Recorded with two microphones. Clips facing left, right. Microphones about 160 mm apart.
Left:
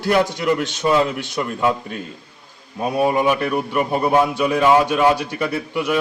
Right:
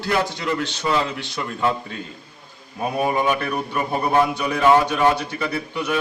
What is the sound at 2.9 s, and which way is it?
A man's voice, 15° left (ahead or behind).